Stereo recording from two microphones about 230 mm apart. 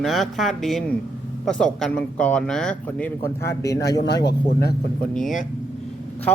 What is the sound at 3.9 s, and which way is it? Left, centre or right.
Speech, left.